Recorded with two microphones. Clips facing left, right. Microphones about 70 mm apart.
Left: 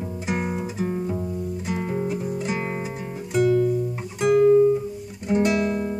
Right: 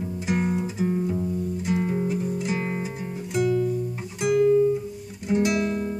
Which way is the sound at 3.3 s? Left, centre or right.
Left.